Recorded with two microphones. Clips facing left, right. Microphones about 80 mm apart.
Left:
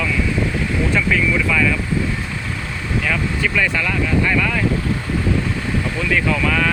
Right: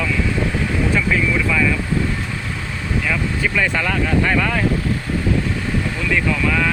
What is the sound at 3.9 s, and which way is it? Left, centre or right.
Speech, right.